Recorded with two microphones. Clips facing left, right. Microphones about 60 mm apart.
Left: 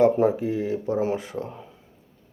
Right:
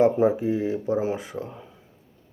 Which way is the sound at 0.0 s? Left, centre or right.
Centre.